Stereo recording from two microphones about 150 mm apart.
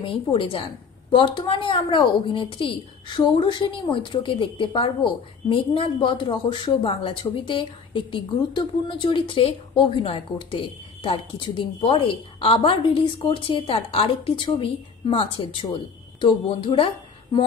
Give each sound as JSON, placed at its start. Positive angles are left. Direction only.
{"t": 0.0, "sound": "a woman's voice", "side_deg": 35}